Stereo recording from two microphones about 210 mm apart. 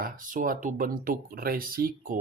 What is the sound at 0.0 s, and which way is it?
Speech, 40° right (ahead or behind).